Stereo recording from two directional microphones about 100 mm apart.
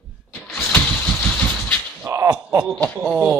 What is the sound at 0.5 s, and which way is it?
Vehicle, 20° left (ahead or behind).